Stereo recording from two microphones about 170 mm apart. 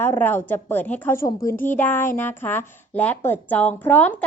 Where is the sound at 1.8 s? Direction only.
10° left (ahead or behind).